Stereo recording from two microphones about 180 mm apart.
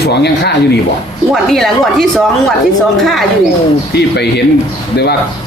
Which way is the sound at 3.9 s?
65° left (ahead or behind).